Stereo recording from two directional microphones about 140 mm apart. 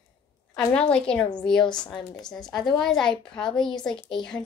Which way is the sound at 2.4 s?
30° left (ahead or behind).